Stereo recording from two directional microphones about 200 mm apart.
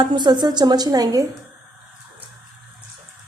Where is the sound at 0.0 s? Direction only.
20° right (ahead or behind).